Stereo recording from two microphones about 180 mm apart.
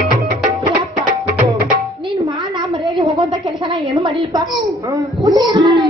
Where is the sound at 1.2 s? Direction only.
50° right (ahead or behind).